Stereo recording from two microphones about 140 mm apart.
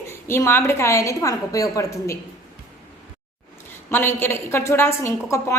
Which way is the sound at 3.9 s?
15° left (ahead or behind).